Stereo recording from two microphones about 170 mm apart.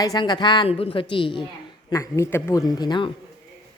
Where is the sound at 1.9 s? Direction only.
20° left (ahead or behind).